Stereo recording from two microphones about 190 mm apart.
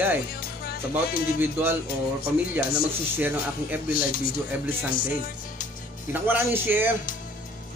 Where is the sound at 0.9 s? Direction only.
10° right (ahead or behind).